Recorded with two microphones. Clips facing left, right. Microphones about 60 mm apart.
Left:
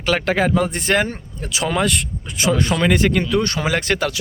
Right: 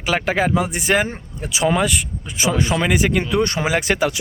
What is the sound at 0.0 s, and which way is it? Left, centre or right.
Speech, centre.